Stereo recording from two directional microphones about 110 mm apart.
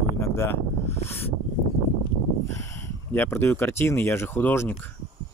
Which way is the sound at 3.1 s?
20° left (ahead or behind).